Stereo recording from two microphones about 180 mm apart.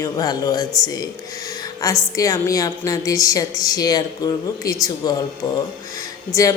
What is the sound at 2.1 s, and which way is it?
A woman's voice, 20° left (ahead or behind).